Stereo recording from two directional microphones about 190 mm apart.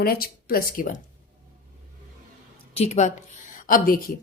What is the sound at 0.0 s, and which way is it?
A woman's voice, 50° left (ahead or behind).